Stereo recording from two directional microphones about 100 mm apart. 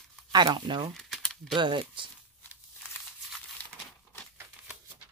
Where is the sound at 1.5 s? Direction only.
55° right (ahead or behind).